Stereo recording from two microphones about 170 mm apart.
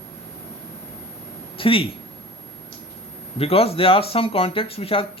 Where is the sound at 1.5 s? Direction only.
30° left (ahead or behind).